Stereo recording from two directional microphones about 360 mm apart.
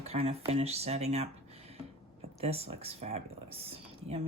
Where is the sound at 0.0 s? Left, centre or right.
Centre.